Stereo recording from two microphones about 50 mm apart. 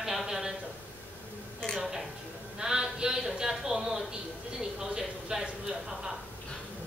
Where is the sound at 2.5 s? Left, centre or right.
Centre.